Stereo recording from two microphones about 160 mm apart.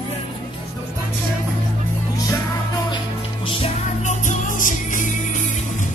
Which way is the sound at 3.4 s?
45° left (ahead or behind).